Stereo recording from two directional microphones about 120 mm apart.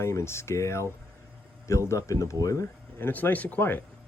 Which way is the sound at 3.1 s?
15° left (ahead or behind).